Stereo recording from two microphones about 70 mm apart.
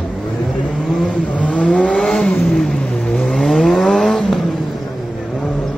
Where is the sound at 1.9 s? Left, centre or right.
Centre.